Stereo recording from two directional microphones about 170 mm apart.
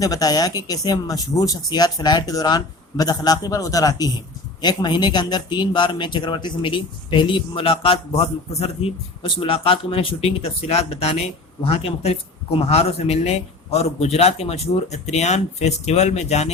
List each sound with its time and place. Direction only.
0.0 s a man's voice: 20° left (ahead or behind); by 16.5 s 40° left (ahead or behind)